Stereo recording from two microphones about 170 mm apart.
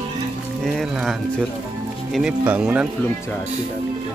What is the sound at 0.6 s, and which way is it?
Music, centre (ahead or behind).